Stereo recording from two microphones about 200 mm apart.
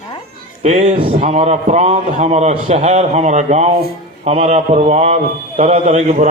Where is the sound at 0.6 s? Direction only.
35° right (ahead or behind).